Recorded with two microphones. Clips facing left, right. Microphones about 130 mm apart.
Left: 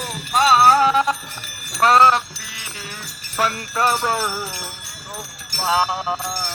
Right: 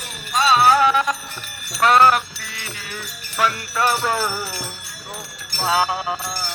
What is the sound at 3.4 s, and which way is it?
Music, 35° left (ahead or behind).